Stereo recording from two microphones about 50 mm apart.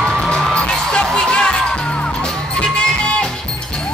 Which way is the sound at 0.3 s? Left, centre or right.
Centre.